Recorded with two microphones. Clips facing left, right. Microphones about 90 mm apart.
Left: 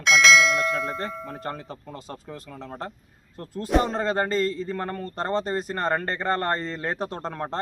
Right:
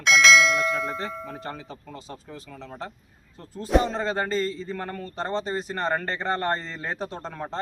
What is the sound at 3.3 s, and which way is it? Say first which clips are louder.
Speech: left 4 dB; 60° left (ahead or behind).